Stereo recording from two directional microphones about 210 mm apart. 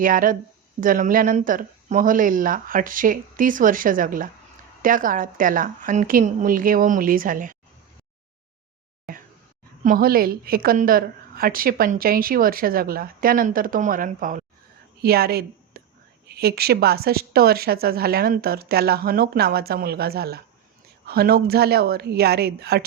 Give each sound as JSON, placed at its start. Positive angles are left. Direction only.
{"t": 0.0, "sound": "speech", "side_deg": -40}
{"t": 9.8, "sound": "a woman's voice", "side_deg": -45}